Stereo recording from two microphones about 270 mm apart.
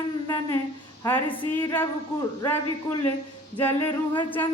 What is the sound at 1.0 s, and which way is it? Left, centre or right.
Speech, centre.